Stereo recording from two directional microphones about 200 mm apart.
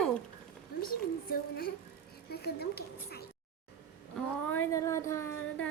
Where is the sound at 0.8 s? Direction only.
50° left (ahead or behind).